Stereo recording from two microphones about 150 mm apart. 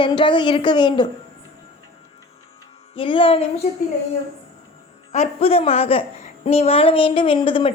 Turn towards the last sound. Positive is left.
turn(degrees=35)  # may be behind; listen again after turning